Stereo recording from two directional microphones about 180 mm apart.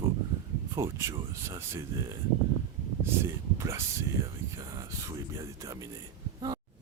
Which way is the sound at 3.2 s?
15° right (ahead or behind).